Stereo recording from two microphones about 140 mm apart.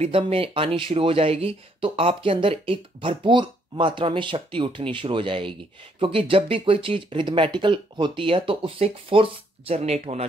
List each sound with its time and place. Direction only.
0.0 s speech: 40° right (ahead or behind)